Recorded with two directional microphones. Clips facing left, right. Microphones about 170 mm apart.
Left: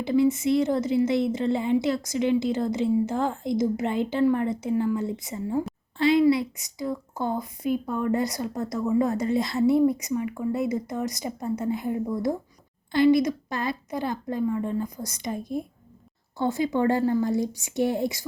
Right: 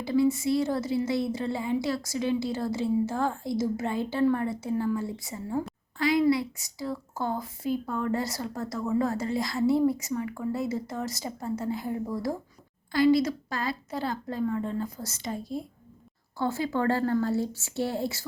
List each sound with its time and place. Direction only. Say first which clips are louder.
0.0 s a woman's voice: left 3 dB; 20° left (ahead or behind)
6.0 s a sound: left 4 dB; 25° left (ahead or behind)
6.2 s a woman's voice: left 3 dB; 20° left (ahead or behind)